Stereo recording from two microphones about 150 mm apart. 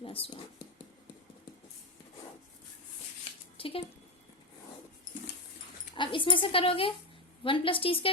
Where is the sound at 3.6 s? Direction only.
35° left (ahead or behind).